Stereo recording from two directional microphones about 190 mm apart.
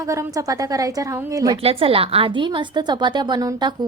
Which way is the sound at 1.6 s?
30° right (ahead or behind).